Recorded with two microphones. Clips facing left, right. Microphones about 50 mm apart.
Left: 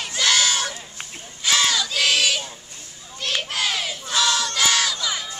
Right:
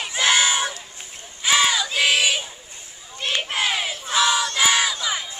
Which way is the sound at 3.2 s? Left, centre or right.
Right.